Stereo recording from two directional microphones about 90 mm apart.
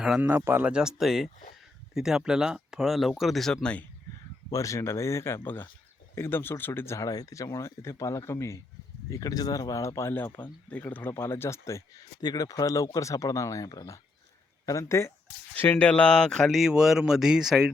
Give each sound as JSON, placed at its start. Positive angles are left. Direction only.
{"t": 0.2, "sound": "speech", "side_deg": -25}
{"t": 0.7, "sound": "speech", "side_deg": -5}
{"t": 4.5, "sound": "speech", "side_deg": 35}
{"t": 12.2, "sound": "speech", "side_deg": 45}
{"t": 15.5, "sound": "speech", "side_deg": 20}